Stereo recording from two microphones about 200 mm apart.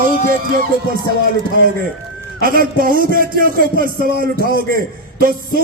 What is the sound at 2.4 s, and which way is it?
A man's voice, 45° right (ahead or behind).